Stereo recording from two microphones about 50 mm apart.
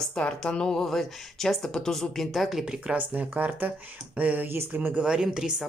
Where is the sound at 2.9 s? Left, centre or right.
Right.